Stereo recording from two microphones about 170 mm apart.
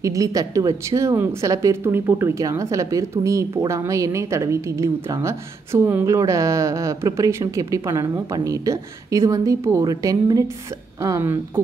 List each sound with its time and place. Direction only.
0.0 s a woman's voice: 20° right (ahead or behind)